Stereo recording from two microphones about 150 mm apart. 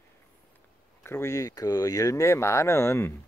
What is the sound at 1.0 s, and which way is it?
Speech, 15° left (ahead or behind).